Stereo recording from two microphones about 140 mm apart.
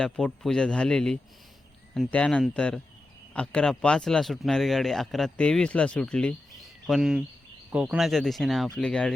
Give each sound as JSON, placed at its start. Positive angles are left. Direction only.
{"t": 0.0, "sound": "speech", "side_deg": 5}